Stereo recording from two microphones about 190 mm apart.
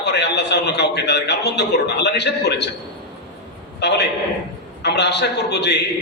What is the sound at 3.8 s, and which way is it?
A man's voice, 60° left (ahead or behind).